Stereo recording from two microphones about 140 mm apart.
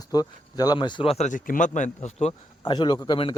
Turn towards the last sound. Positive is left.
turn(degrees=35)  # may be behind; listen again after turning